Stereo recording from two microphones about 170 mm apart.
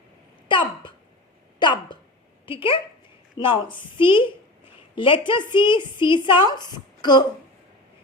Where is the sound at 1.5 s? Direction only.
25° left (ahead or behind).